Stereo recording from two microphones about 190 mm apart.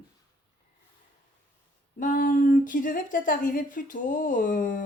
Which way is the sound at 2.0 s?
45° left (ahead or behind).